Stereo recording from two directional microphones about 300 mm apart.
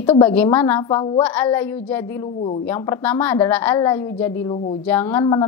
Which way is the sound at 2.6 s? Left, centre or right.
Centre.